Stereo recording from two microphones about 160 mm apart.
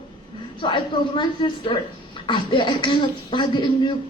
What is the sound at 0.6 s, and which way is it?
A man's voice, 30° left (ahead or behind).